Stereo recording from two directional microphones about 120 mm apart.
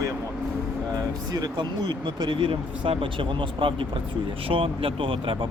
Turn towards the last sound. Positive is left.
turn(degrees=-45)  # may be behind; listen again after turning